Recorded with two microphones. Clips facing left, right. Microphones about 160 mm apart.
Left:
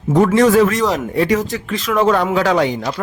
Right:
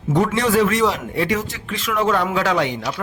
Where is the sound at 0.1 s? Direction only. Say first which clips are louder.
Left 6 dB; 45° left (ahead or behind).